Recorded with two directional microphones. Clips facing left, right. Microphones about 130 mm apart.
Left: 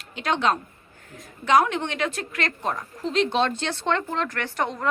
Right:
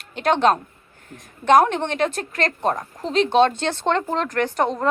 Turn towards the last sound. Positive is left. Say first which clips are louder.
# right 6 dB
turn(degrees=-30)  # may be behind; listen again after turning